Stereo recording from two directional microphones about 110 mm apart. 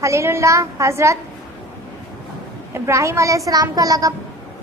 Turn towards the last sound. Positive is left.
turn(degrees=-35)  # may be behind; listen again after turning